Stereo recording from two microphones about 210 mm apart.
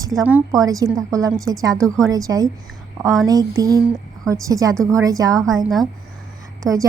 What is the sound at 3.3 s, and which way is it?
A woman's voice, 15° right (ahead or behind).